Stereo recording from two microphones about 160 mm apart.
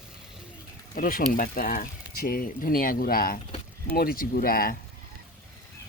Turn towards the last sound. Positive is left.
turn(degrees=65)  # may be behind; listen again after turning